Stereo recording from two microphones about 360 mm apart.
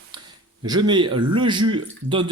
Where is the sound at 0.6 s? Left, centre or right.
Centre.